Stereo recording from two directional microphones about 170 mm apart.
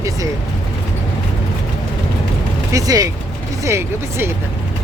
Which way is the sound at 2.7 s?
20° right (ahead or behind).